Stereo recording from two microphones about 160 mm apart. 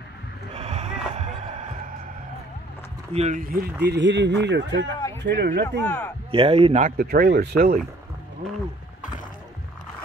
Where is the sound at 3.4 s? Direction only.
65° right (ahead or behind).